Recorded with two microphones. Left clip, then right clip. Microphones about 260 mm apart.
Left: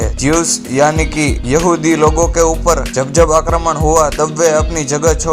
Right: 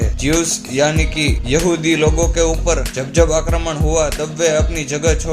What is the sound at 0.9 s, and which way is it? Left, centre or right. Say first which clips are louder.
Speech: left 3 dB; left.